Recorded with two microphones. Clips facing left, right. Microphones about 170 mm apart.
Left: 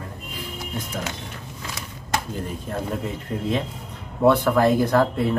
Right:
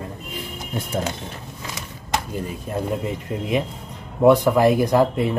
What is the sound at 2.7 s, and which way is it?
Speech, 15° right (ahead or behind).